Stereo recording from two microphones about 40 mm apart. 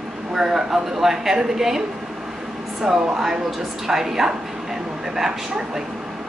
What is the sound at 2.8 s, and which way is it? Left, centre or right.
Speech, centre.